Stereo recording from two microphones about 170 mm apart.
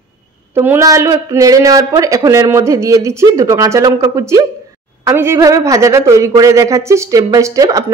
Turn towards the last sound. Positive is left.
turn(degrees=-20)  # may be behind; listen again after turning